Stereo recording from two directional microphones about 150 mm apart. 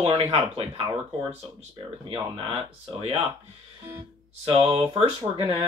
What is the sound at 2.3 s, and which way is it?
Speech, 40° right (ahead or behind).